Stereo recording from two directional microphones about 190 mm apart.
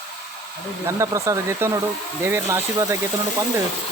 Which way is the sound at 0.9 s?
15° right (ahead or behind).